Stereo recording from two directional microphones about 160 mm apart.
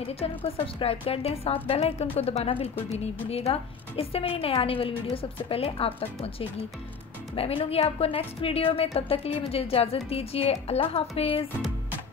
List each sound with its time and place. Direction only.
0.0 s a woman's voice: 35° left (ahead or behind)
7.3 s a woman's voice: 35° left (ahead or behind)